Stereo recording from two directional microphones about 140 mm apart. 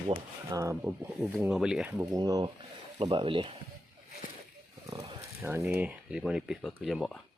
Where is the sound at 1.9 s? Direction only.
25° right (ahead or behind).